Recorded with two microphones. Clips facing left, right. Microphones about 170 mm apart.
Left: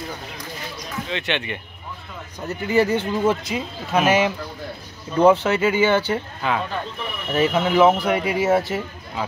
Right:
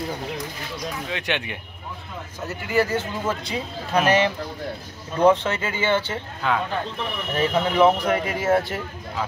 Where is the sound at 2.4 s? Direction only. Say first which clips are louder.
Left 4 dB; 20° left (ahead or behind).